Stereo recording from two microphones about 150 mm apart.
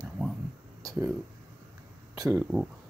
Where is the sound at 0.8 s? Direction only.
25° right (ahead or behind).